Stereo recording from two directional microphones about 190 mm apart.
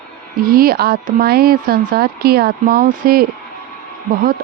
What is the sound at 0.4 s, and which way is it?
Speech, 50° right (ahead or behind).